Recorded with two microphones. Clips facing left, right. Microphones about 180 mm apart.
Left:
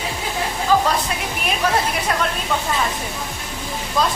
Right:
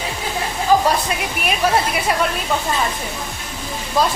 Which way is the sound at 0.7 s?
15° right (ahead or behind).